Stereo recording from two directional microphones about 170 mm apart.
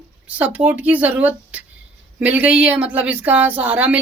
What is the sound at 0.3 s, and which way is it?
Speech, 10° right (ahead or behind).